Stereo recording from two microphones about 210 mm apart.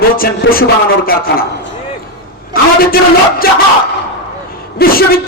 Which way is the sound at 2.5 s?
45° left (ahead or behind).